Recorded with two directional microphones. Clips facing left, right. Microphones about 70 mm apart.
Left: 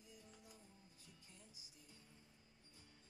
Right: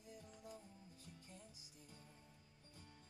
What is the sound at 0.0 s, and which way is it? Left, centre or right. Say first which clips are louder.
Music: right 6 dB; right.